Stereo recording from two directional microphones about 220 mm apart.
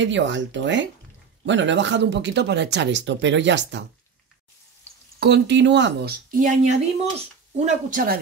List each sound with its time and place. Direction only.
0.0 s speech: 55° right (ahead or behind)
5.2 s speech: 50° right (ahead or behind)
6.3 s speech: 35° right (ahead or behind)